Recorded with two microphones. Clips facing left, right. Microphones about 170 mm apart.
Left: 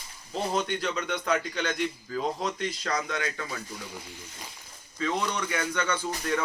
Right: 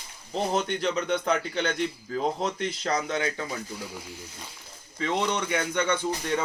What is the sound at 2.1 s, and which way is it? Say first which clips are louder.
Speech: right 4 dB; 25° right (ahead or behind).